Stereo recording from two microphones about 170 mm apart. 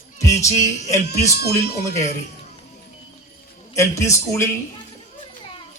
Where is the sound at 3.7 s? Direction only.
15° left (ahead or behind).